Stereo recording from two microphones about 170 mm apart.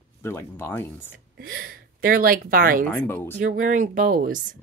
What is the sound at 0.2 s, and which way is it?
Speech, 15° left (ahead or behind).